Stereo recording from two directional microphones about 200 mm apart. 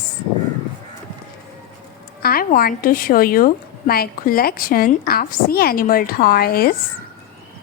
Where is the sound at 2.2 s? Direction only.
45° left (ahead or behind).